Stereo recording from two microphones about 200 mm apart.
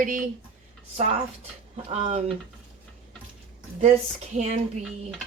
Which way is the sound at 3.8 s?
35° right (ahead or behind).